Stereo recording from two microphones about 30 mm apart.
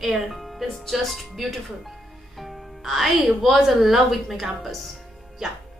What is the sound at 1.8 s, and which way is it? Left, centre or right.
Music, centre.